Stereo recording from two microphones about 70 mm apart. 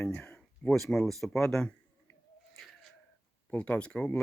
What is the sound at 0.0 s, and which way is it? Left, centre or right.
Speech, left.